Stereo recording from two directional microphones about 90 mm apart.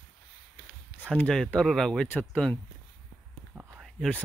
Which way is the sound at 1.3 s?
5° left (ahead or behind).